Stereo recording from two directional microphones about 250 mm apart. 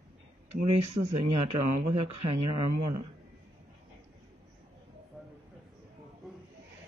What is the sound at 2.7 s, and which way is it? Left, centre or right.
Speech, right.